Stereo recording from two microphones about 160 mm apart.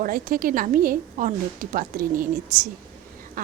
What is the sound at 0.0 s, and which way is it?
Speech, 60° right (ahead or behind).